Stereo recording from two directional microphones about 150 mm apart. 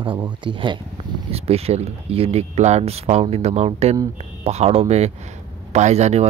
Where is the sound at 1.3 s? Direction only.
40° right (ahead or behind).